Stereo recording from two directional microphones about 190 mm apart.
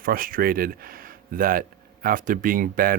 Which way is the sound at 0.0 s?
50° right (ahead or behind).